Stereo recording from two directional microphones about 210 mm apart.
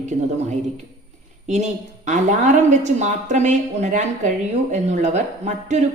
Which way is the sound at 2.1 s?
35° right (ahead or behind).